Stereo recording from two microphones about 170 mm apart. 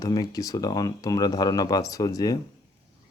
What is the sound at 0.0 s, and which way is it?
Speech, 20° left (ahead or behind).